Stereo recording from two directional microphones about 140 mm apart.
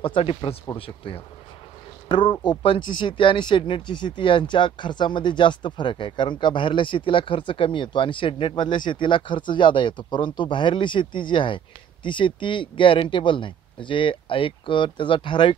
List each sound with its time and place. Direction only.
0.0 s speech: 40° left (ahead or behind)